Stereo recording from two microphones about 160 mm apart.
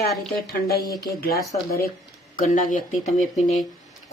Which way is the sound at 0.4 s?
75° left (ahead or behind).